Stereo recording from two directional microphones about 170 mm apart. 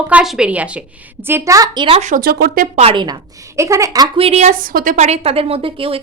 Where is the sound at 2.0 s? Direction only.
55° right (ahead or behind).